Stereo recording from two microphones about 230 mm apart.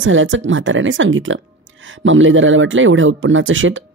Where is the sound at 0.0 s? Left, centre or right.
Right.